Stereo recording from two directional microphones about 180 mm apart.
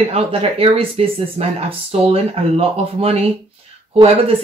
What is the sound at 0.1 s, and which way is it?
Speech, 35° right (ahead or behind).